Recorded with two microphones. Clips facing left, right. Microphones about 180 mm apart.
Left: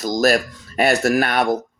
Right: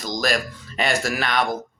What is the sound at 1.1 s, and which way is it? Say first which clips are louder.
Speech: left 5 dB; 55° left (ahead or behind).